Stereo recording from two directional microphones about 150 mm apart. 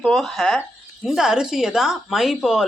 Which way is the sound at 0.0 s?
Centre (ahead or behind).